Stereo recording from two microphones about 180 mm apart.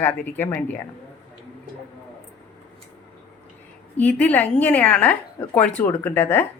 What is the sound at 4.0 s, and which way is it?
Speech, 10° left (ahead or behind).